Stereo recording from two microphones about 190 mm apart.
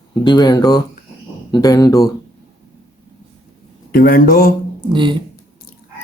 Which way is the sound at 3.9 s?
50° left (ahead or behind).